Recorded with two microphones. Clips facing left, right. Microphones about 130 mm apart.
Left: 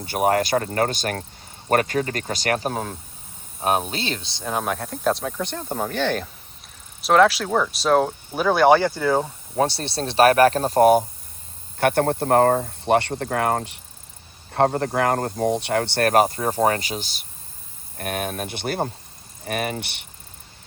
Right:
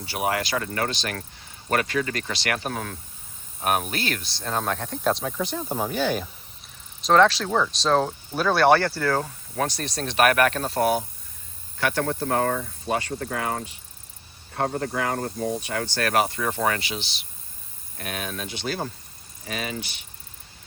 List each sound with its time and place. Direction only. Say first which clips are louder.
0.0 s speech: left 6 dB; 45° left (ahead or behind); by 6.2 s 5° right (ahead or behind)
7.0 s speech: left 2 dB; 5° left (ahead or behind); by 12.7 s 45° left (ahead or behind)
12.8 s speech: left 8 dB; 70° left (ahead or behind)
13.3 s speech: left 8 dB; 55° left (ahead or behind)
15.4 s speech: left 9 dB; 75° left (ahead or behind)